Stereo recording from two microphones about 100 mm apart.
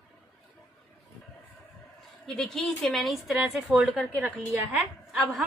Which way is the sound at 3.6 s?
15° right (ahead or behind).